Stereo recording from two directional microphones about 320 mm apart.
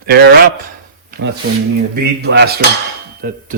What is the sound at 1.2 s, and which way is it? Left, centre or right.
Cutlery, right.